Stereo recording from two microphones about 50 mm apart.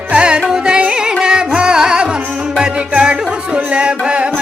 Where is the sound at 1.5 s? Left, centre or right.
Centre.